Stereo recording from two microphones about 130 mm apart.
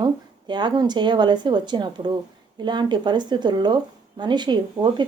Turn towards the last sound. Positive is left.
turn(degrees=-35)  # may be behind; listen again after turning